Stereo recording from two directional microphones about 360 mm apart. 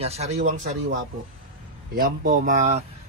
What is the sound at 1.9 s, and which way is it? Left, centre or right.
Speech, right.